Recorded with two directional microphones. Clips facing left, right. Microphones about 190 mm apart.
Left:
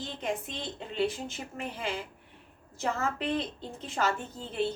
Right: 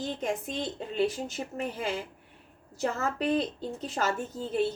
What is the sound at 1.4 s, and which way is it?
Speech, 30° right (ahead or behind).